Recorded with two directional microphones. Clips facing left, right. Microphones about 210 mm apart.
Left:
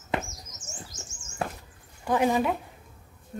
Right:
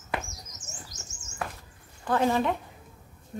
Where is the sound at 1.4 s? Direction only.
30° left (ahead or behind).